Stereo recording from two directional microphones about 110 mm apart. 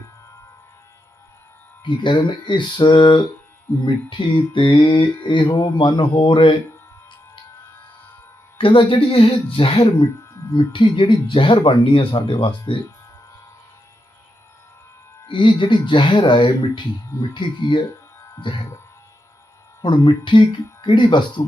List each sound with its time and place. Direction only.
1.8 s speech: 45° left (ahead or behind)
8.5 s speech: 55° left (ahead or behind)
10.7 s speech: 45° left (ahead or behind)
15.3 s speech: 50° left (ahead or behind)
19.8 s speech: 45° left (ahead or behind)